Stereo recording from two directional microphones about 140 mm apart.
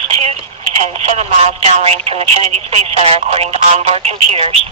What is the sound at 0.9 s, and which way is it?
Speech, 50° right (ahead or behind).